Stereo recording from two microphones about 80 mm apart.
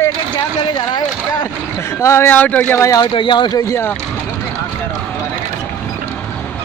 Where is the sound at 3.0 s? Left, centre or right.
Left.